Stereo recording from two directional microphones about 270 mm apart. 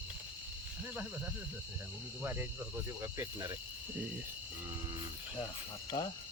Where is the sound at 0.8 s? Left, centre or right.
Centre.